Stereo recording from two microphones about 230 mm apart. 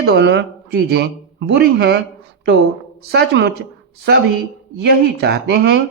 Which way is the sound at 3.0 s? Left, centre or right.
Right.